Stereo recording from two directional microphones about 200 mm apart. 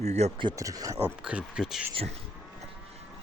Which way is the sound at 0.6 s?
15° right (ahead or behind).